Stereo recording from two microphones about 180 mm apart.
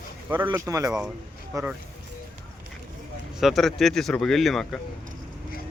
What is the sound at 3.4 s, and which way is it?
Speech, centre (ahead or behind).